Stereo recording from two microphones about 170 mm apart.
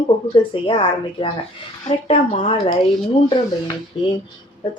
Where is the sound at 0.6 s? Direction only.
30° left (ahead or behind).